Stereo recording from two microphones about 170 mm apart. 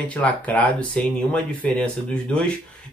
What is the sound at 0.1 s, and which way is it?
A man's voice, 10° left (ahead or behind).